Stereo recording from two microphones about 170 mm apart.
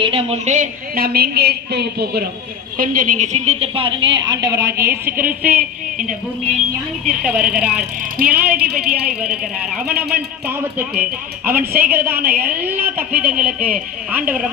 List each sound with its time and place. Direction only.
0.0 s a woman's voice: 35° right (ahead or behind); by 2.2 s 75° right (ahead or behind)
2.7 s a woman's voice: 55° right (ahead or behind); by 5.6 s 10° right (ahead or behind)
7.1 s a woman's voice: 5° right (ahead or behind)
8.2 s a woman's voice: 55° right (ahead or behind)
8.9 s a woman's voice: 5° right (ahead or behind)